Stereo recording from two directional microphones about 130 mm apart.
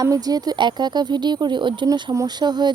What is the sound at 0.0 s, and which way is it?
Speech, 30° right (ahead or behind).